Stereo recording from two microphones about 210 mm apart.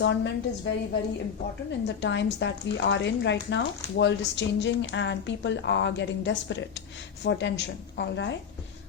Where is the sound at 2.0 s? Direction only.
60° left (ahead or behind).